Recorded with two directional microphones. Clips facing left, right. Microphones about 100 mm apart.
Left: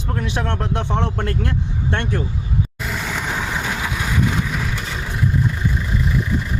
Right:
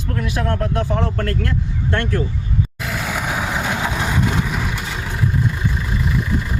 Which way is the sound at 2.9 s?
Centre (ahead or behind).